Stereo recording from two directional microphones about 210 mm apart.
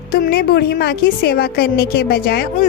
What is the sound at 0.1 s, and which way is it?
A woman's voice, 45° left (ahead or behind).